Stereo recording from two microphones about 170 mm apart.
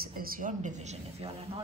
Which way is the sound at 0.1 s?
55° right (ahead or behind).